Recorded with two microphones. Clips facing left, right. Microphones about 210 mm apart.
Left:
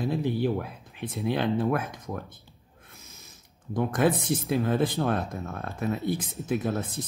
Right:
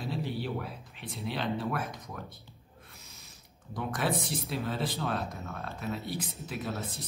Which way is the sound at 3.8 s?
50° left (ahead or behind).